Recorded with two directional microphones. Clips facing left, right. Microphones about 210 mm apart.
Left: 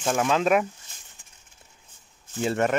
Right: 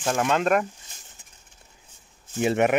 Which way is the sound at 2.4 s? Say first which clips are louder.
Right 3 dB; 15° right (ahead or behind).